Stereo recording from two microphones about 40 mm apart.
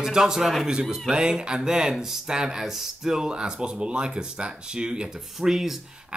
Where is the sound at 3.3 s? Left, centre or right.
Right.